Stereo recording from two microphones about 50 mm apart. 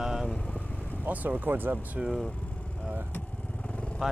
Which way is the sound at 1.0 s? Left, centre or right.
Right.